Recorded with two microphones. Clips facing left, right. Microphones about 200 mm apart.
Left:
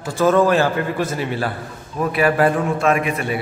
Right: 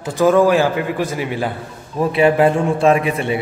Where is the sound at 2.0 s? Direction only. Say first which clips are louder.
Right 3 dB; 25° right (ahead or behind).